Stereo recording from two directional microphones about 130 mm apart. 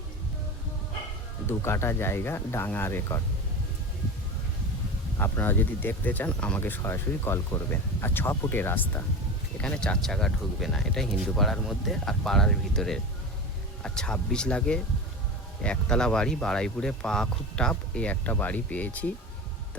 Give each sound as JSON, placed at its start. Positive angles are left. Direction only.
{"t": 1.5, "sound": "speech", "side_deg": 20}
{"t": 5.1, "sound": "speech", "side_deg": 15}